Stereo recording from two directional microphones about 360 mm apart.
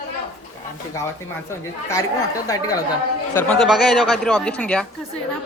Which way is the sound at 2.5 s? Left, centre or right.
Centre.